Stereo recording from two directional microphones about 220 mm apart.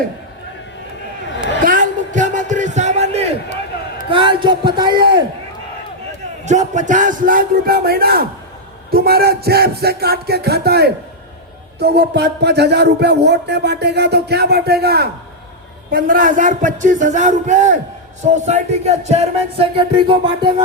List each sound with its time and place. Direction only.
1.6 s a sound: 35° right (ahead or behind)
4.1 s music: 20° right (ahead or behind)
4.9 s speech: 50° right (ahead or behind)
6.4 s speech: 30° right (ahead or behind)
18.3 s music: 30° right (ahead or behind)